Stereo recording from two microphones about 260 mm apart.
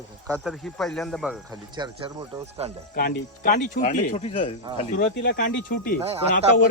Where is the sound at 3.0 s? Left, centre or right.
Left.